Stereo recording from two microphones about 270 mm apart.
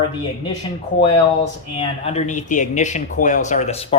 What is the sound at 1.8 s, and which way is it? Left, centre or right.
A man's voice, left.